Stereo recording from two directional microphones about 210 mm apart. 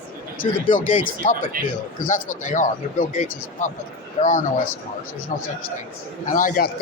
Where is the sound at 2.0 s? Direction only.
40° left (ahead or behind).